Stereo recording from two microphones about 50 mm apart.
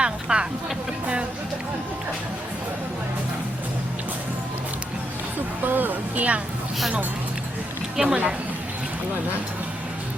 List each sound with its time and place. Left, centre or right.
0.0 s a sound: centre
5.6 s a woman's voice: right
7.9 s a woman's voice: centre